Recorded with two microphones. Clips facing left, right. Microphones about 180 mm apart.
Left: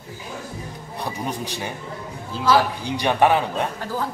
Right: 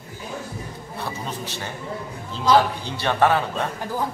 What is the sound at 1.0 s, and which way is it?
Speech, 15° left (ahead or behind).